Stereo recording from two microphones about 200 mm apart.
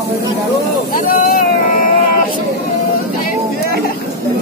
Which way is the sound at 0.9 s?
45° left (ahead or behind).